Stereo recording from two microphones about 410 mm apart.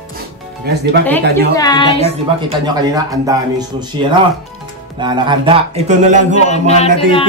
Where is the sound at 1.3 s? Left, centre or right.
Centre.